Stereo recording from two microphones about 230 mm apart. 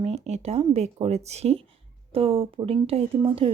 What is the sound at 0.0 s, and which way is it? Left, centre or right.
A woman's voice, right.